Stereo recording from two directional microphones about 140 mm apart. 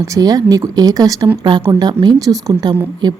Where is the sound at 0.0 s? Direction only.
25° right (ahead or behind).